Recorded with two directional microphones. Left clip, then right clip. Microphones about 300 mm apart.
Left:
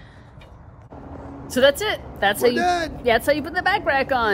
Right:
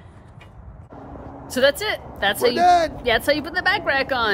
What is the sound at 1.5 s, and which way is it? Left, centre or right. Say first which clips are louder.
Speech: left 1 dB; centre.